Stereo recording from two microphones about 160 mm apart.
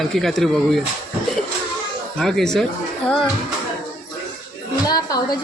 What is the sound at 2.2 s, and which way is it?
Speech, centre (ahead or behind).